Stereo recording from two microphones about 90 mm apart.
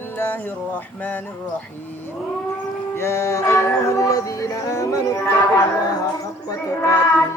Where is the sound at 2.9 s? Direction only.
30° left (ahead or behind).